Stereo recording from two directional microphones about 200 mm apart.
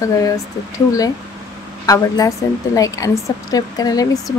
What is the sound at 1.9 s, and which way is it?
A woman's voice, 15° left (ahead or behind).